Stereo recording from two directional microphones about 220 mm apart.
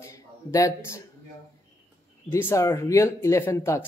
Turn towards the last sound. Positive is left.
turn(degrees=15)  # may be behind; listen again after turning